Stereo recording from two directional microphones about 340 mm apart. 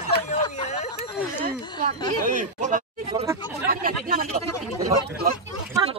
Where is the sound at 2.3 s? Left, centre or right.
Right.